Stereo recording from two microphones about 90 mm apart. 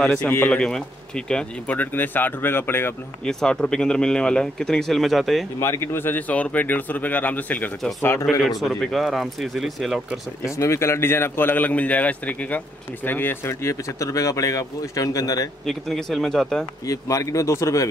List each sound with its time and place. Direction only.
0.0 s a man's voice: 10° left (ahead or behind)
3.3 s speech: 5° left (ahead or behind)
5.6 s a man's voice: 30° left (ahead or behind)
8.0 s a man's voice: 30° left (ahead or behind)
8.5 s speech: centre (ahead or behind)
10.4 s a man's voice: 35° left (ahead or behind)
15.6 s speech: centre (ahead or behind)
16.8 s speech: 40° left (ahead or behind)